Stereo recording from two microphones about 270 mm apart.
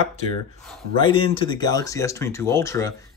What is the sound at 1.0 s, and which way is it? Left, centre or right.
Speech, centre.